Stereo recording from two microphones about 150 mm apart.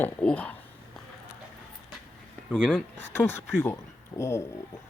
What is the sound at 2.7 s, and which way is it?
Speech, 15° left (ahead or behind).